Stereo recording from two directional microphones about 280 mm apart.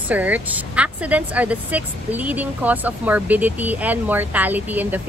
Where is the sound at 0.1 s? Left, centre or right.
Centre.